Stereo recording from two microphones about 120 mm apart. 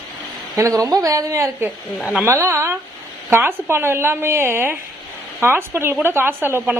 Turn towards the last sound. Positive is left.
turn(degrees=-20)  # may be behind; listen again after turning